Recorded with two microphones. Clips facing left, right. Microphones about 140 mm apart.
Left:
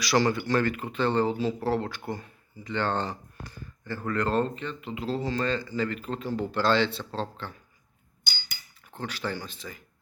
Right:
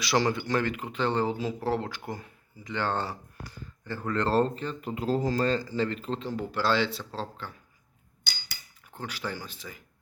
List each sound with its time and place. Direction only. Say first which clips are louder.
0.0 s speech: left 2 dB; 20° right (ahead or behind)
6.3 s speech: left 3 dB; 10° right (ahead or behind)
8.9 s speech: left 3 dB; 10° right (ahead or behind)